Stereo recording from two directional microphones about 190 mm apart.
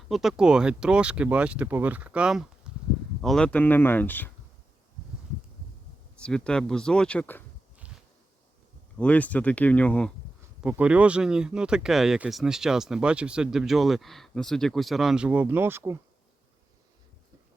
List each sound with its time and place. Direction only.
0.1 s speech: centre (ahead or behind)
6.1 s speech: 5° left (ahead or behind)
9.0 s speech: 5° left (ahead or behind)
10.6 s speech: 5° right (ahead or behind)